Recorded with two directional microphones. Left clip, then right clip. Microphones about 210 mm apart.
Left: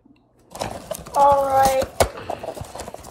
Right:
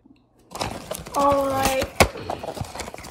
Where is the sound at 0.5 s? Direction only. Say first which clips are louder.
Left 1 dB; centre (ahead or behind).